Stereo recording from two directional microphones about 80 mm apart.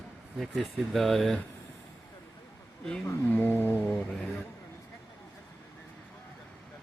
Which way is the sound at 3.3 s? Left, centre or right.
Left.